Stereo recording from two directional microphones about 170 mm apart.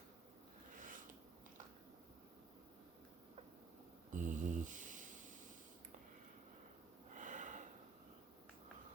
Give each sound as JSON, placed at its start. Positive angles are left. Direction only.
{"t": 4.1, "sound": "mantra", "side_deg": -50}
{"t": 7.2, "sound": "snort", "side_deg": -50}